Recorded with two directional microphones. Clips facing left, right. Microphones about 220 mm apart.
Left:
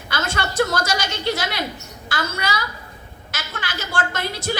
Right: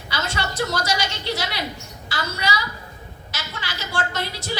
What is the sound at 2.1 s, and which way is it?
Speech, 50° left (ahead or behind).